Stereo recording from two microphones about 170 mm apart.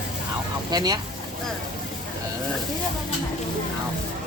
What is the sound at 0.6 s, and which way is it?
Speech, 25° right (ahead or behind).